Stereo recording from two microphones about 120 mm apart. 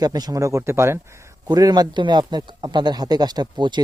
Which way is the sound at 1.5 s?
35° right (ahead or behind).